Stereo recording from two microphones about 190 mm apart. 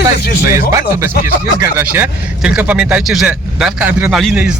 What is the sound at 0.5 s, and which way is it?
Speech, 15° right (ahead or behind).